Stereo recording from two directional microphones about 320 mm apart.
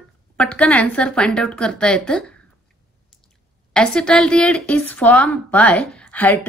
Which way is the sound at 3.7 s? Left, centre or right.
Centre.